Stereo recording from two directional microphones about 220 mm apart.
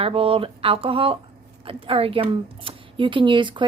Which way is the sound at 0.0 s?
25° right (ahead or behind).